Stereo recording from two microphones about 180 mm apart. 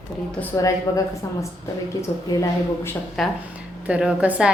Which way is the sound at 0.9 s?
20° left (ahead or behind).